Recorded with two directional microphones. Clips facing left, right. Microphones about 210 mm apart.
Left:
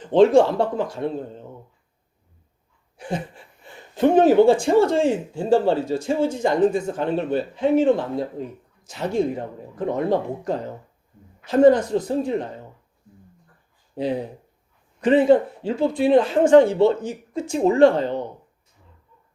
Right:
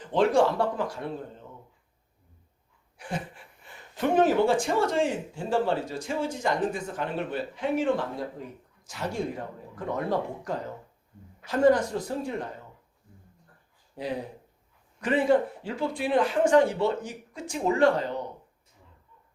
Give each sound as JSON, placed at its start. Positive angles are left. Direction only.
{"t": 0.1, "sound": "speech", "side_deg": 25}
{"t": 3.9, "sound": "speech", "side_deg": 25}
{"t": 15.0, "sound": "speech", "side_deg": 25}